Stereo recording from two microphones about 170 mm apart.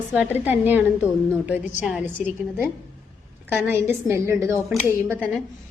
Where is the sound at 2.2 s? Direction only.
45° left (ahead or behind).